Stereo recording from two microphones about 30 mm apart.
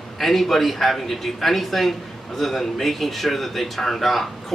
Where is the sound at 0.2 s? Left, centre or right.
Centre.